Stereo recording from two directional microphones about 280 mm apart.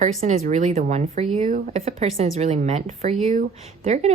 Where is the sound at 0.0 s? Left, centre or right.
Right.